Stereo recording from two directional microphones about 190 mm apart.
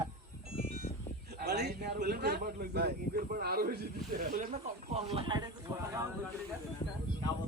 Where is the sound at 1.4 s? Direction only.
60° right (ahead or behind); by 6.1 s 15° right (ahead or behind).